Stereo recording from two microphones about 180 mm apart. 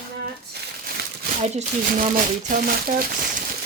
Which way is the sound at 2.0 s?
50° right (ahead or behind).